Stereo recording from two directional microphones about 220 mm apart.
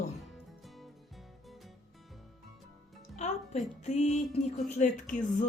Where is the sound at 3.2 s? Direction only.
30° left (ahead or behind).